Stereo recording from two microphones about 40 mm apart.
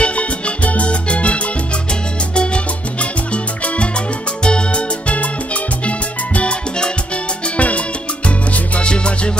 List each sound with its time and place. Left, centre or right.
0.0 s music: left
2.3 s salsa music: left
3.6 s music: left
7.5 s salsa music: left
8.7 s music: left